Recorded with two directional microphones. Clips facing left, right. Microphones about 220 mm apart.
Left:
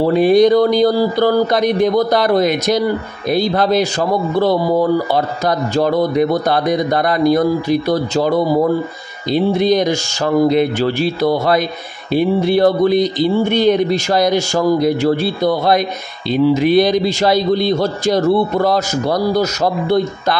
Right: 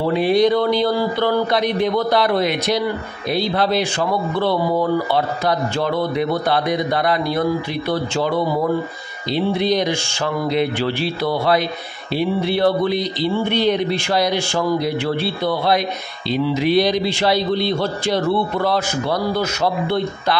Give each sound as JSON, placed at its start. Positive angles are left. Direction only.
{"t": 0.0, "sound": "a man's voice", "side_deg": 45}